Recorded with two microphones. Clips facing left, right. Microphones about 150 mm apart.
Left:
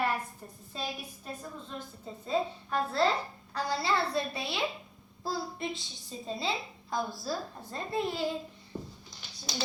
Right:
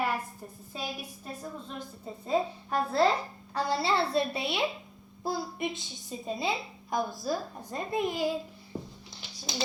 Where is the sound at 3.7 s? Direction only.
25° right (ahead or behind).